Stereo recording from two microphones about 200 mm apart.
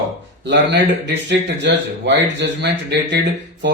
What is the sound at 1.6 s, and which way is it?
Speech, 60° right (ahead or behind).